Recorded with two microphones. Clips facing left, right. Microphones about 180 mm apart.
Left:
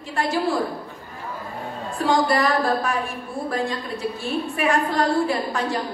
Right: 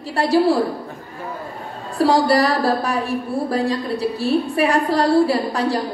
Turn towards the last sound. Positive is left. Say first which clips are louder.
# right 4 dB
turn(degrees=-35)  # may be behind; listen again after turning